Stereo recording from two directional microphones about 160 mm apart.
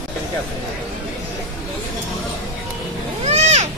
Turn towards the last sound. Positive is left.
turn(degrees=-45)  # may be behind; listen again after turning